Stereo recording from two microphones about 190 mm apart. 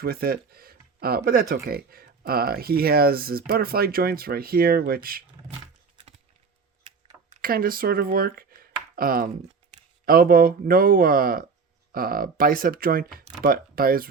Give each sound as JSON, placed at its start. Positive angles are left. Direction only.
{"t": 0.0, "sound": "speech", "side_deg": -50}
{"t": 7.4, "sound": "speech", "side_deg": -50}